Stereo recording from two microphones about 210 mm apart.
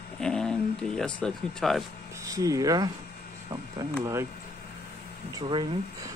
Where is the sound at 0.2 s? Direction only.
5° left (ahead or behind).